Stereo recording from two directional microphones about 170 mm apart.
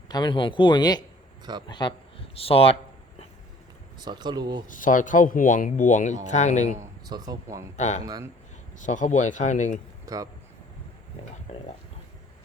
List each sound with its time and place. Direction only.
0.1 s speech: 25° left (ahead or behind)
3.9 s speech: 25° right (ahead or behind)
4.7 s speech: 50° left (ahead or behind)
6.7 s speech: 20° right (ahead or behind)
7.8 s speech: 40° left (ahead or behind)
8.0 s speech: 20° right (ahead or behind)
8.8 s speech: 45° left (ahead or behind)
10.1 s speech: 20° right (ahead or behind)
11.5 s speech: 40° left (ahead or behind)